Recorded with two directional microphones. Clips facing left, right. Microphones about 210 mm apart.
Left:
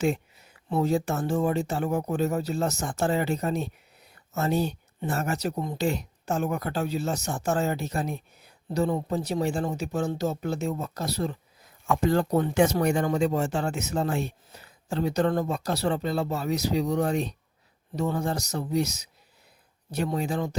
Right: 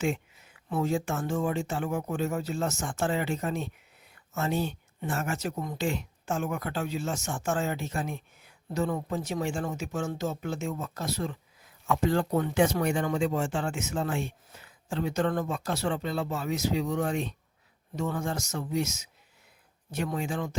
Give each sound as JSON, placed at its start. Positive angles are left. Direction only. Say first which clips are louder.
{"t": 0.0, "sound": "speech", "louder": "left 4 dB", "side_deg": 40}